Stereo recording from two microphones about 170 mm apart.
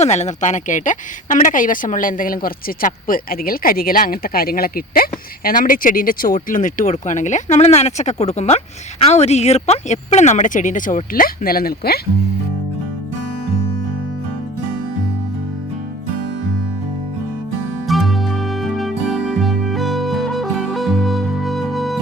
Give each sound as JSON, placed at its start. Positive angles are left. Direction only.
{"t": 0.0, "sound": "speech", "side_deg": 40}
{"t": 17.8, "sound": "music", "side_deg": 0}